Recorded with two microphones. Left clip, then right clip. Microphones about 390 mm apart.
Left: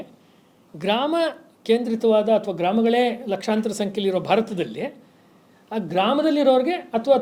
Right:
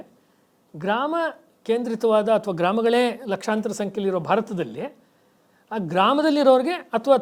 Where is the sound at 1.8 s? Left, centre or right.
Right.